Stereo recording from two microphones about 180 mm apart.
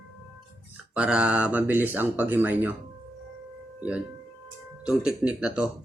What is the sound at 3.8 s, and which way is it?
Speech, 10° right (ahead or behind).